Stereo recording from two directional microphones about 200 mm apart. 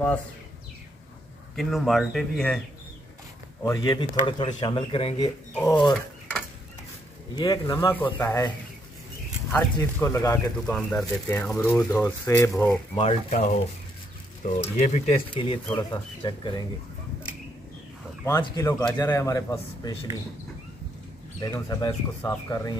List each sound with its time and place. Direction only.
1.6 s speech: centre (ahead or behind)
3.6 s speech: 20° left (ahead or behind)
7.3 s speech: 20° left (ahead or behind)
9.8 s speech: 15° left (ahead or behind)
12.9 s speech: 30° left (ahead or behind)
18.2 s speech: 15° left (ahead or behind)
21.4 s speech: 15° left (ahead or behind)